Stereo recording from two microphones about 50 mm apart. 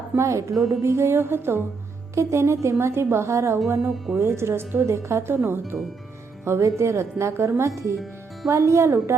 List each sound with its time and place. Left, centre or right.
0.2 s speech: right
0.5 s speech: centre
0.8 s speech: right
2.1 s speech: right
3.8 s speech: centre
4.2 s speech: right
6.4 s speech: right
8.4 s speech: right